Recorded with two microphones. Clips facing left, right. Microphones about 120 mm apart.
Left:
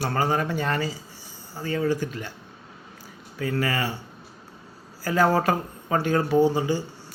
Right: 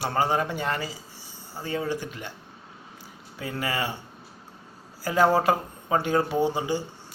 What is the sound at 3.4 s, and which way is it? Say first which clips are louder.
Speech: left 3 dB; 20° right (ahead or behind).